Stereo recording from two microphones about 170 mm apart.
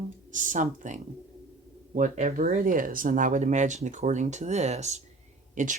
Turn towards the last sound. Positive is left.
turn(degrees=-45)  # may be behind; listen again after turning